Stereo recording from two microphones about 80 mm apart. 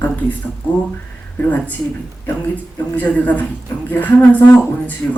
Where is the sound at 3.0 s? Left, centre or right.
Centre.